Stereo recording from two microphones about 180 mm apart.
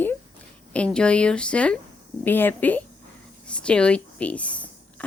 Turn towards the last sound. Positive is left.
turn(degrees=5)  # may be behind; listen again after turning